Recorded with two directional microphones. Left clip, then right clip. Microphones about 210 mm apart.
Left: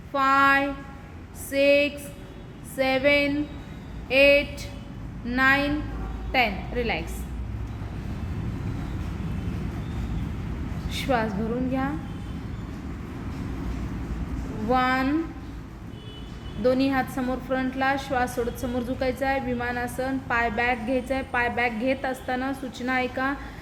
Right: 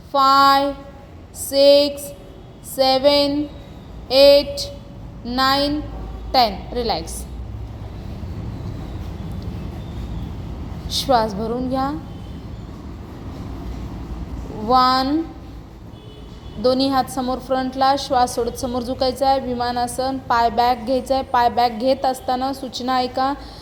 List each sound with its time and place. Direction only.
0.1 s a woman's voice: 10° right (ahead or behind)
10.9 s a woman's voice: 15° right (ahead or behind)
14.7 s a woman's voice: 15° right (ahead or behind)
16.6 s a woman's voice: 15° right (ahead or behind)